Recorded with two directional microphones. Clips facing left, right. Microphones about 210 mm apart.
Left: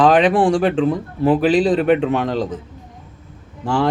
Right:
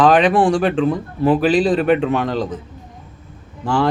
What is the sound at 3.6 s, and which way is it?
Speech, 25° left (ahead or behind).